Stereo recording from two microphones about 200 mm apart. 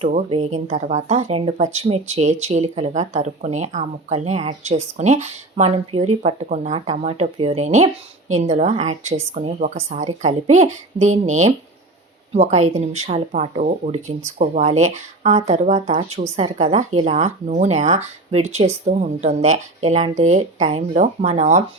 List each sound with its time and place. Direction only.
0.0 s speech: 35° right (ahead or behind)